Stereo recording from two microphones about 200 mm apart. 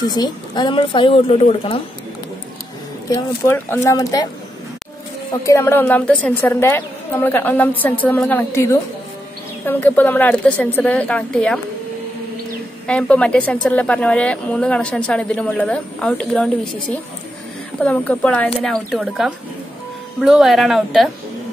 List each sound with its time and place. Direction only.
0.0 s speech: 20° left (ahead or behind)
3.1 s a woman's voice: 15° left (ahead or behind)
5.4 s a woman's voice: 15° left (ahead or behind)
12.8 s a woman's voice: 5° left (ahead or behind)
17.8 s a woman's voice: 5° left (ahead or behind)